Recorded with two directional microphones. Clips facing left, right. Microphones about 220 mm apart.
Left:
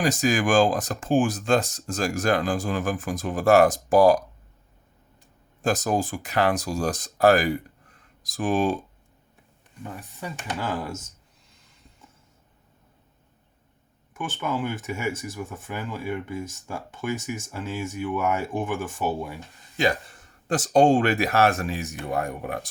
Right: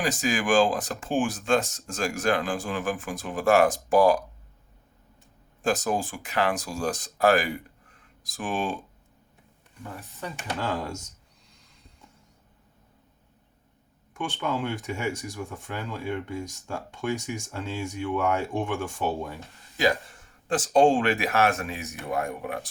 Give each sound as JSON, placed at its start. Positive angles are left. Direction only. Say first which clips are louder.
{"t": 0.0, "sound": "speech", "louder": "left 4 dB", "side_deg": 40}
{"t": 5.6, "sound": "speech", "louder": "left 2 dB", "side_deg": 40}
{"t": 9.8, "sound": "speech", "louder": "left 1 dB", "side_deg": 15}
{"t": 14.1, "sound": "speech", "louder": "left 1 dB", "side_deg": 5}
{"t": 20.5, "sound": "speech", "louder": "left 2 dB", "side_deg": 40}